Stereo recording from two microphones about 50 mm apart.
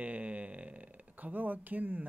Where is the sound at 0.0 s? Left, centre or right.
Right.